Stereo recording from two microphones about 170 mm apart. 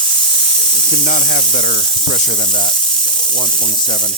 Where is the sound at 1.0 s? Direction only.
50° left (ahead or behind).